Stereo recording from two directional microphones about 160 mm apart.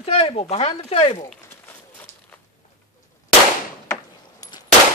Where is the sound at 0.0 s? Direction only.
40° left (ahead or behind).